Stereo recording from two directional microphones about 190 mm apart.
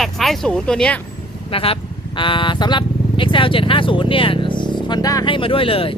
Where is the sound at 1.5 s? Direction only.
30° left (ahead or behind).